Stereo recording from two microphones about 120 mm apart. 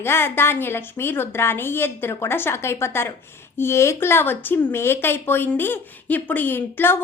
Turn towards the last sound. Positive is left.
turn(degrees=15)  # may be behind; listen again after turning